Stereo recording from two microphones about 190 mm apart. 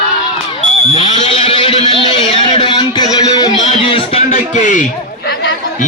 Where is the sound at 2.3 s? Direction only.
25° left (ahead or behind); by 5.5 s 60° left (ahead or behind).